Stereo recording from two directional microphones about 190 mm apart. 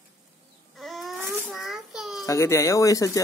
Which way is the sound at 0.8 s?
Centre (ahead or behind).